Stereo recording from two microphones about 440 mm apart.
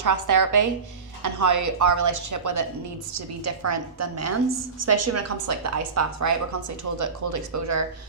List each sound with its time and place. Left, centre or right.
0.0 s a woman's voice: right